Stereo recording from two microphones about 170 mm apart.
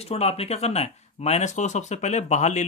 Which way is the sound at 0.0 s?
40° left (ahead or behind).